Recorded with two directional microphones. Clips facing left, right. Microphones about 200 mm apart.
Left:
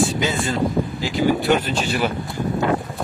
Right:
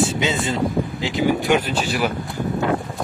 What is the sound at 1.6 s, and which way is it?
Speech, 10° right (ahead or behind).